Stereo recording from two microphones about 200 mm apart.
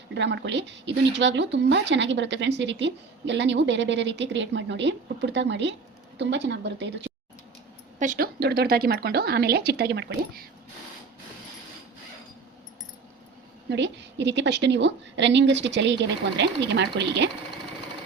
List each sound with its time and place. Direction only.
0.1 s speech: 60° right (ahead or behind)
7.9 s speech: 40° right (ahead or behind)
13.7 s speech: 60° right (ahead or behind)